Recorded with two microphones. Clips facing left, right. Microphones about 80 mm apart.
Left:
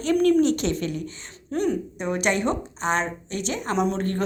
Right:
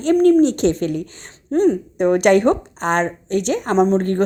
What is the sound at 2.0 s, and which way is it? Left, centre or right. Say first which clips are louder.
Speech: right 13 dB; right.